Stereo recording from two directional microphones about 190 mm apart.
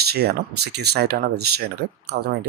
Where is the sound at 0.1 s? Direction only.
55° right (ahead or behind).